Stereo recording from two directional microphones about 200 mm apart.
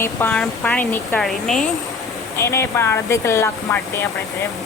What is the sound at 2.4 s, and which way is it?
Speech, 15° left (ahead or behind).